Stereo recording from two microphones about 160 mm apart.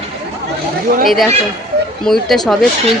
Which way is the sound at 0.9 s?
65° right (ahead or behind).